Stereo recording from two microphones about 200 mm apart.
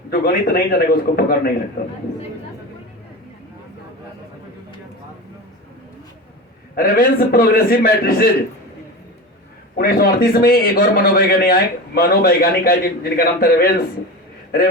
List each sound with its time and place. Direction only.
0.1 s a man's voice: 45° left (ahead or behind)
6.7 s a man's voice: 50° left (ahead or behind)
9.7 s a man's voice: 50° left (ahead or behind)